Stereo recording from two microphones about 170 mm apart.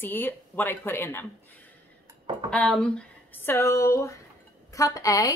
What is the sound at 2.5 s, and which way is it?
A woman's voice, 5° left (ahead or behind).